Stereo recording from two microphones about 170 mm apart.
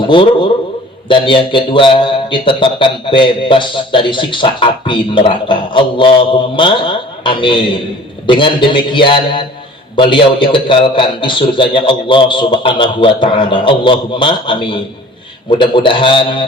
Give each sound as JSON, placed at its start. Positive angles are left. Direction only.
{"t": 0.0, "sound": "a man's voice", "side_deg": 30}